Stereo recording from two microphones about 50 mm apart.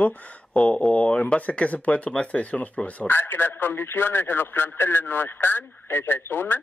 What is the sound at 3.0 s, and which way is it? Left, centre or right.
A man's voice, left.